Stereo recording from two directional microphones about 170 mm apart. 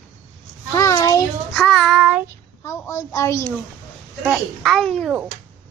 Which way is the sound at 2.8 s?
15° left (ahead or behind).